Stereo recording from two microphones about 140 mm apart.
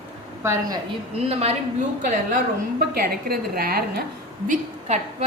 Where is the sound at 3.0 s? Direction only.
90° right.